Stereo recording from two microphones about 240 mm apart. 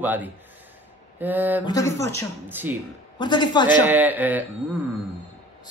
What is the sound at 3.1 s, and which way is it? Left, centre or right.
Speech, centre.